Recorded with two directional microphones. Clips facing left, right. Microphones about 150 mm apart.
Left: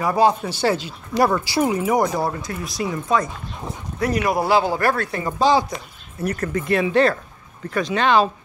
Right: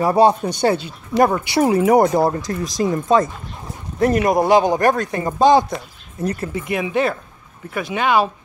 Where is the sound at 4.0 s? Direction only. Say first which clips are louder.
Right 5 dB; 50° right (ahead or behind).